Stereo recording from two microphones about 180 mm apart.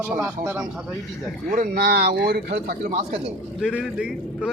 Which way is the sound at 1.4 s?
45° right (ahead or behind).